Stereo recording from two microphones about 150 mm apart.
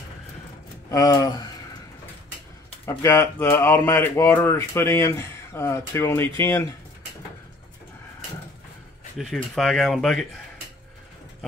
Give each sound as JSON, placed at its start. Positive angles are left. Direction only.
{"t": 0.8, "sound": "speech", "side_deg": 25}
{"t": 2.8, "sound": "speech", "side_deg": 20}
{"t": 9.2, "sound": "speech", "side_deg": 0}